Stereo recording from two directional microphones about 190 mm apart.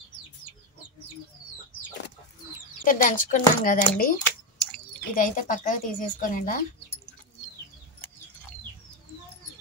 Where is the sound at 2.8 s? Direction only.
45° left (ahead or behind).